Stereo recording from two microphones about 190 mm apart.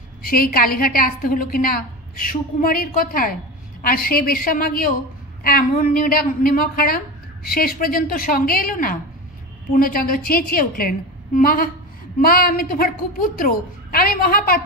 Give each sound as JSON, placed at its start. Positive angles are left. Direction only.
{"t": 0.2, "sound": "a woman's voice", "side_deg": 50}